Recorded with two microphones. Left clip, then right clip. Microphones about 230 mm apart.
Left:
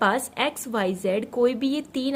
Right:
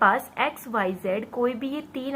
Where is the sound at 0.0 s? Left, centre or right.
Left.